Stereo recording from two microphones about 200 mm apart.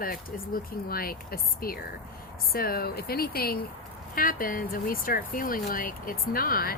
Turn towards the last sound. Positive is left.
turn(degrees=45)  # may be behind; listen again after turning